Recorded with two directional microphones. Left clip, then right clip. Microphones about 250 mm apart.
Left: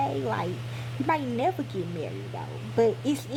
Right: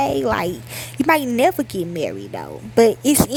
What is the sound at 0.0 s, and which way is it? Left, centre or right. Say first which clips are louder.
Speech: right 9 dB; right.